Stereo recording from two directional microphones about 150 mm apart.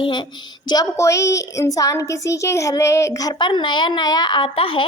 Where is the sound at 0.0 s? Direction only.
30° left (ahead or behind).